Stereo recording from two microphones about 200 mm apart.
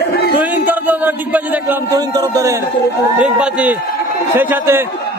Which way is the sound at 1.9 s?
20° right (ahead or behind).